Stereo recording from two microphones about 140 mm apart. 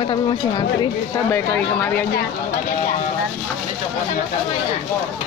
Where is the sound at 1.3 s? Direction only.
10° left (ahead or behind).